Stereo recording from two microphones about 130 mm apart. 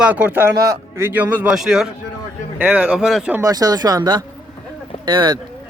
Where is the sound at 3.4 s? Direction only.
30° right (ahead or behind).